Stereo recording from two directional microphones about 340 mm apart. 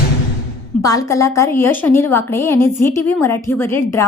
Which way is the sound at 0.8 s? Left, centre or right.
Centre.